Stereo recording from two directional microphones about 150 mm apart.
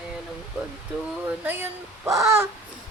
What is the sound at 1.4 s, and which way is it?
Speech, 15° right (ahead or behind).